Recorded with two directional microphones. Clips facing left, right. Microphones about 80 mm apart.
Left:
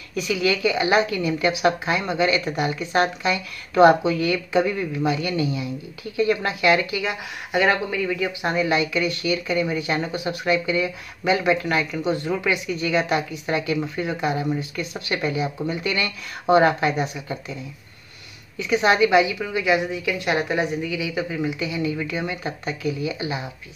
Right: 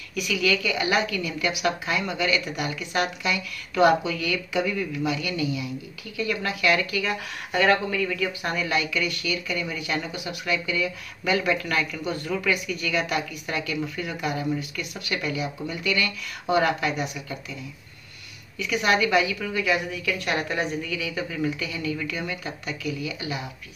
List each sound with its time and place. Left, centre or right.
0.1 s a woman's voice: left
18.6 s speech: left